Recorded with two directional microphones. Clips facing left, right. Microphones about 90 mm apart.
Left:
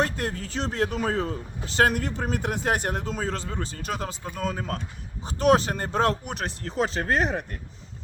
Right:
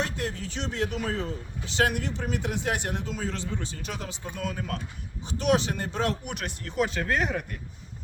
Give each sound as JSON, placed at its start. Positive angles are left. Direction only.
{"t": 0.0, "sound": "speech", "side_deg": 45}